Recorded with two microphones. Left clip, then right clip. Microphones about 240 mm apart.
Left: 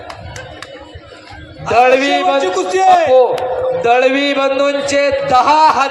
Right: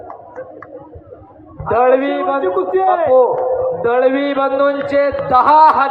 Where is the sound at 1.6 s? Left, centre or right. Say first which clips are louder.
Left 2 dB; left.